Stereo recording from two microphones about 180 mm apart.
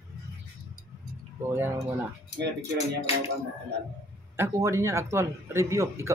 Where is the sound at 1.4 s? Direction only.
15° right (ahead or behind).